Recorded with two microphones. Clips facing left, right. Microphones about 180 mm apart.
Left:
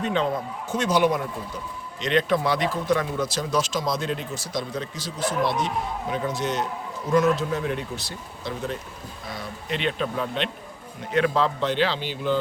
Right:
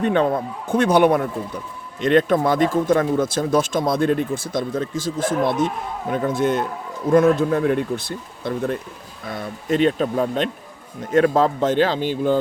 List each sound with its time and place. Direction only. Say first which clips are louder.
0.0 s speech: right 6 dB; 55° right (ahead or behind)